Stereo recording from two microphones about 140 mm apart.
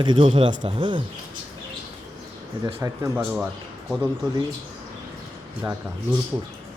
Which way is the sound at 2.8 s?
20° right (ahead or behind).